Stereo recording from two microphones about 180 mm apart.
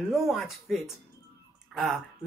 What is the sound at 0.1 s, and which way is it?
Speech, centre (ahead or behind).